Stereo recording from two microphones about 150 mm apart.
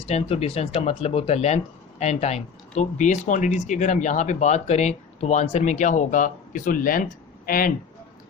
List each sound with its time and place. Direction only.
0.1 s speech: 45° left (ahead or behind); by 7.7 s 70° left (ahead or behind)